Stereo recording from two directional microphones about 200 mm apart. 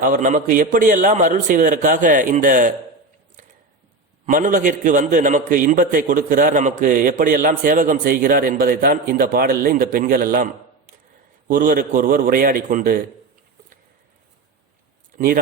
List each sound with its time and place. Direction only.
0.0 s a man's voice: 40° right (ahead or behind)
4.3 s a man's voice: 40° right (ahead or behind)